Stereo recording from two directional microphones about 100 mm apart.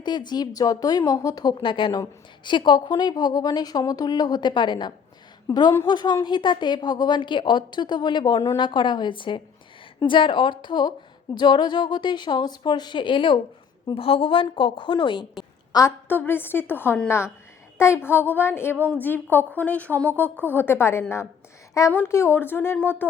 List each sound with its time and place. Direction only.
0.0 s speech: 45° left (ahead or behind)
5.5 s a woman's voice: 30° left (ahead or behind)
5.8 s a woman's voice: 45° left (ahead or behind)
13.9 s a woman's voice: 70° left (ahead or behind); by 15.3 s 55° left (ahead or behind)
15.7 s speech: 45° left (ahead or behind)
16.0 s a woman's voice: 20° left (ahead or behind)